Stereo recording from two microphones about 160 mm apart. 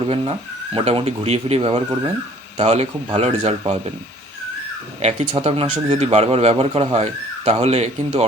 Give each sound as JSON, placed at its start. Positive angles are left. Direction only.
{"t": 0.0, "sound": "speech", "side_deg": -35}
{"t": 5.0, "sound": "speech", "side_deg": -40}